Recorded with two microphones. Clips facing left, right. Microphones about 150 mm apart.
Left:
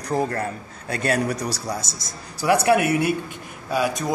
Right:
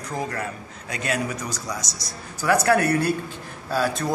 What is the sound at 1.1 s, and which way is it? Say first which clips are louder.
Speech: left 4 dB; 35° left (ahead or behind).